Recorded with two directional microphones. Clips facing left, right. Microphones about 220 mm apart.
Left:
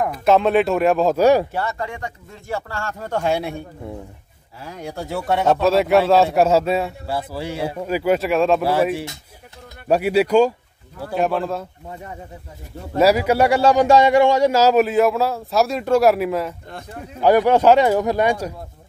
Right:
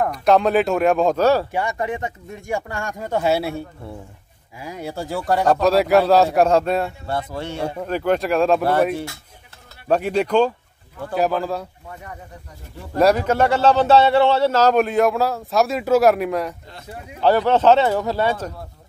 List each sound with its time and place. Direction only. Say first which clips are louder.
0.0 s speech: even; centre (ahead or behind)
1.2 s speech: left 5 dB; 15° left (ahead or behind)
1.5 s speech: right 2 dB; 15° right (ahead or behind)
3.8 s speech: left 3 dB; 15° left (ahead or behind)
4.6 s speech: right 1 dB; 10° right (ahead or behind)
12.9 s speech: left 1 dB; 5° left (ahead or behind)
17.2 s speech: left 2 dB; 15° left (ahead or behind)